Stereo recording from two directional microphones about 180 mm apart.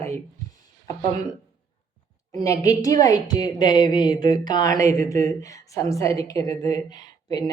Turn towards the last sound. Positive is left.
turn(degrees=20)  # may be behind; listen again after turning